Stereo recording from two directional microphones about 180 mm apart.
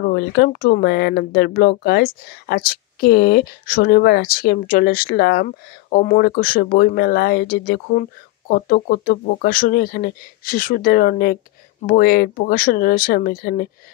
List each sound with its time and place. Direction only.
0.0 s speech: 60° left (ahead or behind)